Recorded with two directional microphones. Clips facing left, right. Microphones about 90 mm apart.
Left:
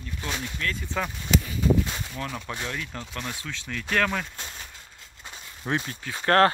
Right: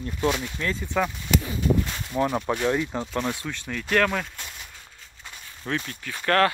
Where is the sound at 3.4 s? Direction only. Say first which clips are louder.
Right 2 dB; 10° right (ahead or behind).